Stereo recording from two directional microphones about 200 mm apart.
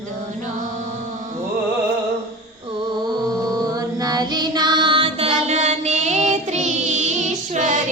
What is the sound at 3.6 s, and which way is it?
Child singing, 20° right (ahead or behind).